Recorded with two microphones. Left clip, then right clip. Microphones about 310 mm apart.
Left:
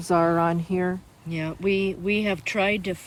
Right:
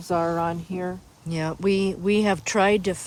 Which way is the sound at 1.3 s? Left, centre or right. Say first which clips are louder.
Right 1 dB; centre.